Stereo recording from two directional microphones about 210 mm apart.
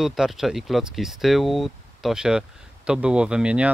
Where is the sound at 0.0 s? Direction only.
Centre (ahead or behind).